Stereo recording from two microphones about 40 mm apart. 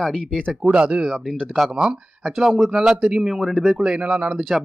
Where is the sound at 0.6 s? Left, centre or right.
Right.